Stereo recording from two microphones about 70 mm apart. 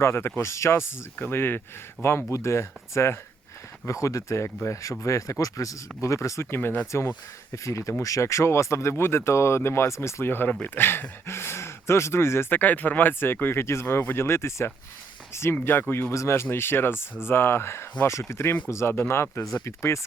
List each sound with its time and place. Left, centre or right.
0.0 s speech: left
3.8 s speech: left
6.5 s speech: left
7.5 s speech: left
15.6 s speech: left
16.1 s speech: left